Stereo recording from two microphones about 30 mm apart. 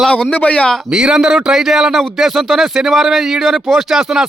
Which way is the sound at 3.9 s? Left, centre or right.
Centre.